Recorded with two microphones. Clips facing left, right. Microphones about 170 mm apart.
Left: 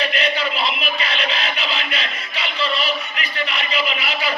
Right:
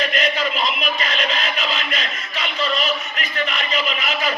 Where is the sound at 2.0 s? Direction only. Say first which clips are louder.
Even; 35° left (ahead or behind).